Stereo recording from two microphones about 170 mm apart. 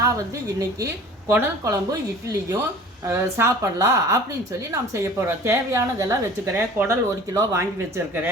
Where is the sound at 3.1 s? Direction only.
15° right (ahead or behind).